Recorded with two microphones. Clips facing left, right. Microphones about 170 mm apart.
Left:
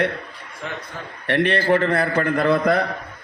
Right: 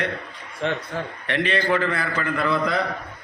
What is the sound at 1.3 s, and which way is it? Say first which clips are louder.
A man's voice: left 4 dB; 60° left (ahead or behind).